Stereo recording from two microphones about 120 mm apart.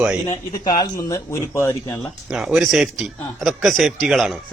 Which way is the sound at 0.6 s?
35° left (ahead or behind).